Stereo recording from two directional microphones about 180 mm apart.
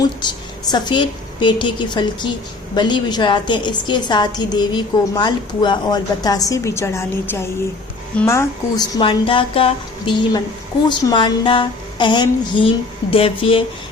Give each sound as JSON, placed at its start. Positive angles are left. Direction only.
{"t": 0.2, "sound": "a woman's voice", "side_deg": 25}
{"t": 9.0, "sound": "a woman's voice", "side_deg": 30}